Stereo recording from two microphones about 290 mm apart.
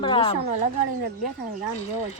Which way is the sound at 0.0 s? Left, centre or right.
Centre.